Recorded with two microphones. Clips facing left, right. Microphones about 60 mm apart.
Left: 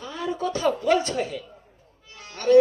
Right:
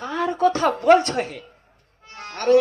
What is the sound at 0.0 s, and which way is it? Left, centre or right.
A woman's voice, right.